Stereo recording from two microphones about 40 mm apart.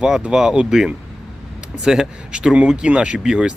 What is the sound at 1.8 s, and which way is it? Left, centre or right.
Speech, centre.